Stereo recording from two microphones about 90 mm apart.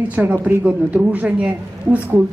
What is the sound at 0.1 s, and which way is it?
A woman's voice, 15° right (ahead or behind).